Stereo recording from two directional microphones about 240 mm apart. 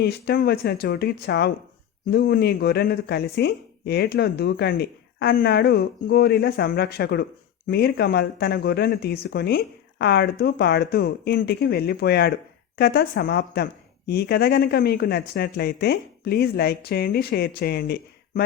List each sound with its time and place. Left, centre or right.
0.0 s speech: left